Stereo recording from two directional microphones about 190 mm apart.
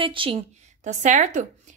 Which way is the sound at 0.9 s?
40° right (ahead or behind).